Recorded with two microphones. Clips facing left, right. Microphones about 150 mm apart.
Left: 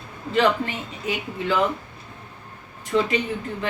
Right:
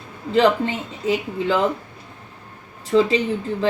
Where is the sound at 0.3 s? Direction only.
25° right (ahead or behind).